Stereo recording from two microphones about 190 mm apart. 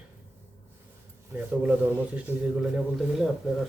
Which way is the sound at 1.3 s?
5° right (ahead or behind).